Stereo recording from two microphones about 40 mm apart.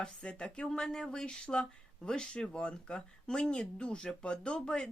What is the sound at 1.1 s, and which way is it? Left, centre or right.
Speech, left.